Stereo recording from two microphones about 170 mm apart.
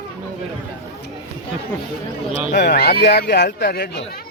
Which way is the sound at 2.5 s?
80° left.